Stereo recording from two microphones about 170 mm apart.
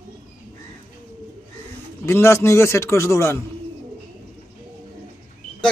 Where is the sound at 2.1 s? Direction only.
15° left (ahead or behind).